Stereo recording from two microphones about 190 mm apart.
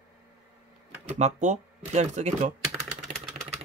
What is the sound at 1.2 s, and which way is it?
Speech, 40° right (ahead or behind).